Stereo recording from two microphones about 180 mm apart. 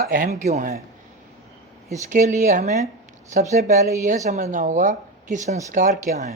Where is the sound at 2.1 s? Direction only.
45° right (ahead or behind).